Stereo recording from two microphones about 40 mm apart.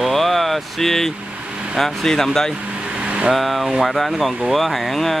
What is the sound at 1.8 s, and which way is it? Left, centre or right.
Speech, centre.